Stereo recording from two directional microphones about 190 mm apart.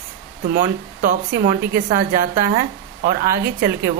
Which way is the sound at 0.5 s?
50° right (ahead or behind).